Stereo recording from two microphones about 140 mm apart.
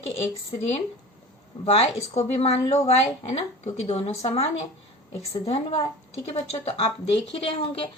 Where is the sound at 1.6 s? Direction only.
45° left (ahead or behind).